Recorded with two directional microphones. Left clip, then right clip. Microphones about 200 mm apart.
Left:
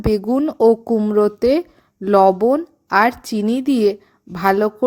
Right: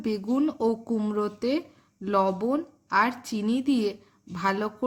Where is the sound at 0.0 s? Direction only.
35° left (ahead or behind).